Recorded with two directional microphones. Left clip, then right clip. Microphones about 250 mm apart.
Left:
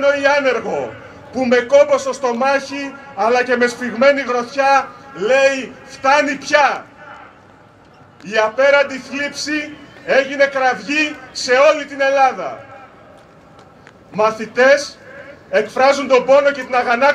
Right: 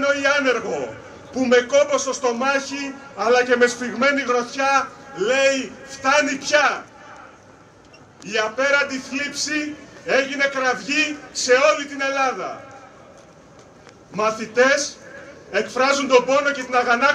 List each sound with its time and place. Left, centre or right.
0.0 s a man's voice: left
8.3 s a man's voice: left
14.1 s a man's voice: left